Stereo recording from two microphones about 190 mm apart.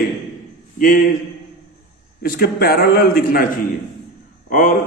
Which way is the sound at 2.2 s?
50° left (ahead or behind).